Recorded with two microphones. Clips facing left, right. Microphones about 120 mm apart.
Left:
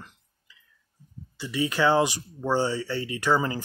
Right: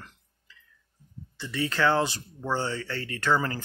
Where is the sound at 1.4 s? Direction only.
15° left (ahead or behind).